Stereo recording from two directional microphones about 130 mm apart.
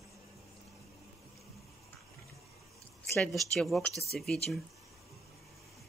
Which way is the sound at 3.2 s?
Centre (ahead or behind).